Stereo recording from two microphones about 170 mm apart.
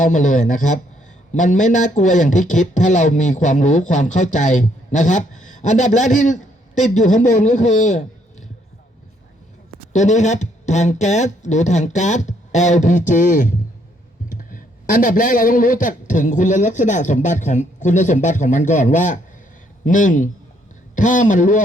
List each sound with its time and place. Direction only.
0.0 s speech: 45° left (ahead or behind)
9.9 s speech: 45° left (ahead or behind)